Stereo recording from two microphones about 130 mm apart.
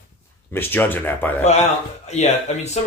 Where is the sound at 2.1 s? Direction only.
60° left (ahead or behind).